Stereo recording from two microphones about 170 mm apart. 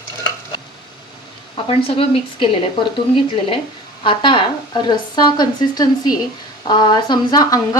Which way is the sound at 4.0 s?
30° left (ahead or behind).